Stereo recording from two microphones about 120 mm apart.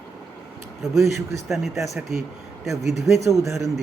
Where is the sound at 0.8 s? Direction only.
Centre (ahead or behind).